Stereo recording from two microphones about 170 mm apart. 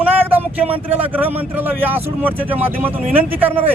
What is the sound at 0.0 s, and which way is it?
Speech, 10° right (ahead or behind).